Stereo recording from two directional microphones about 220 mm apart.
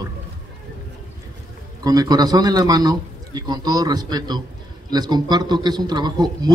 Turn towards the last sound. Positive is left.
turn(degrees=-20)  # may be behind; listen again after turning